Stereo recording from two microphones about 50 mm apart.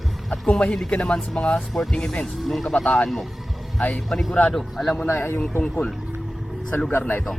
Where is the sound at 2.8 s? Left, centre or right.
Left.